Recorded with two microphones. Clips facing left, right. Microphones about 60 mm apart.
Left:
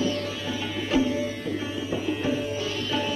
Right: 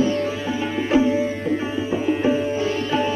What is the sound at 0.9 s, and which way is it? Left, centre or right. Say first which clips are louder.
Music: right 6 dB; right.